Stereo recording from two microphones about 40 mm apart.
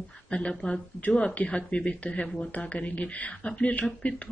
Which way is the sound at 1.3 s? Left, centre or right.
Left.